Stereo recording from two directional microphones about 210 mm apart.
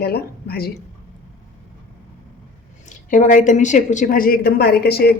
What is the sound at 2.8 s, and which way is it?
A woman's voice, 35° left (ahead or behind).